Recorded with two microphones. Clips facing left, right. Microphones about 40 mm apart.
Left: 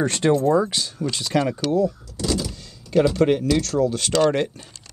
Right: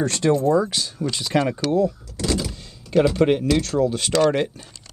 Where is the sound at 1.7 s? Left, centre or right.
Right.